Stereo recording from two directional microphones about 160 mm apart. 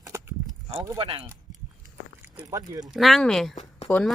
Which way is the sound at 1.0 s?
35° right (ahead or behind).